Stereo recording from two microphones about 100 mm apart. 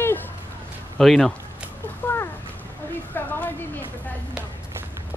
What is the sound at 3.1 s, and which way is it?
Speech, 20° left (ahead or behind).